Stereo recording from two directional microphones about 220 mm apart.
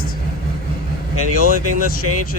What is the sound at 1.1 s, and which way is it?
Speech, 90° left.